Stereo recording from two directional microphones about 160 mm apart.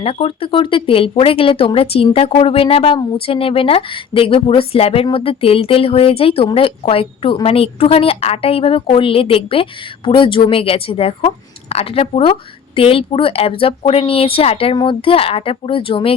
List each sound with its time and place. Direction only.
0.0 s speech: 40° left (ahead or behind)